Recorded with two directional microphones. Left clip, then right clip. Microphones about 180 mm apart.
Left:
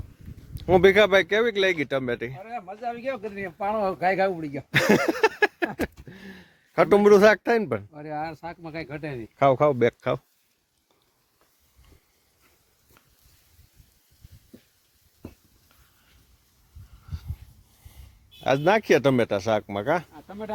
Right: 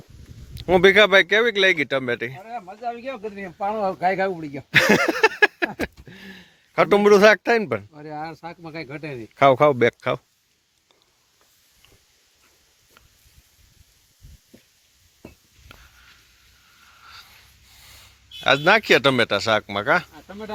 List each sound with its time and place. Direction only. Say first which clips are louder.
0.5 s speech: right 3 dB; 10° left (ahead or behind)
6.1 s speech: right 3 dB; 25° left (ahead or behind); by 7.9 s 10° left (ahead or behind)
7.9 s speech: left 1 dB; 30° left (ahead or behind)
9.3 s speech: right 4 dB; 10° right (ahead or behind)
9.8 s speech: right 3 dB; 10° left (ahead or behind)
18.3 s speech: right 4 dB; 20° left (ahead or behind)